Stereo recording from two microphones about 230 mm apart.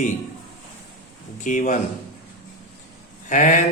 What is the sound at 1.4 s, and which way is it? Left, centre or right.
Speech, left.